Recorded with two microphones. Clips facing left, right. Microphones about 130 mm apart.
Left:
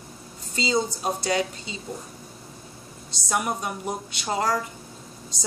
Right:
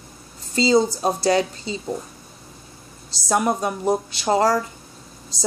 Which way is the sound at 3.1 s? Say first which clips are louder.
Right 6 dB; 35° right (ahead or behind).